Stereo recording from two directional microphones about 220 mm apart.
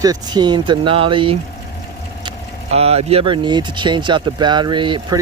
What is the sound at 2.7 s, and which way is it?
Speech, 30° right (ahead or behind).